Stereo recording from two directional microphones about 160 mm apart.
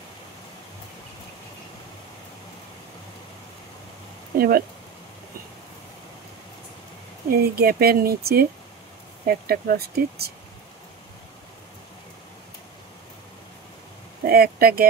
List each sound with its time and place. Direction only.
4.4 s speech: 70° right (ahead or behind)
7.2 s speech: 70° right (ahead or behind)
14.2 s speech: 70° right (ahead or behind)